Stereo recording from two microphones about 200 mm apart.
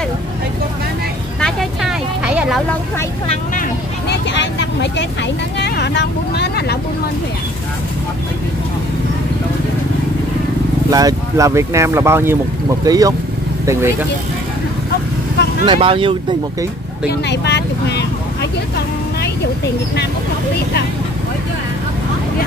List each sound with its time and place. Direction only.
1.4 s vehicle: centre (ahead or behind)
4.1 s vehicle: 60° left (ahead or behind)
5.6 s speech: 55° left (ahead or behind)
10.9 s speech: 20° right (ahead or behind)
15.6 s speech: 25° right (ahead or behind)
17.1 s speech: 55° left (ahead or behind)